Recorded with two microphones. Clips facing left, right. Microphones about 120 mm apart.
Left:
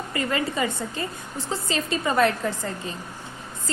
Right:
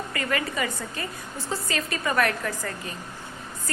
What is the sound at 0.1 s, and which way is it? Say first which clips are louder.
A woman's voice: left 4 dB; 25° left (ahead or behind).